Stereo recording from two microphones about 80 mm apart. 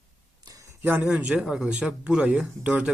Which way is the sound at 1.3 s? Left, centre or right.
Centre.